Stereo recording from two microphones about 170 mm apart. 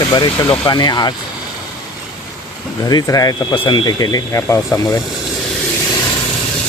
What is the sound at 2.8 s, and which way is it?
Speech, 20° left (ahead or behind).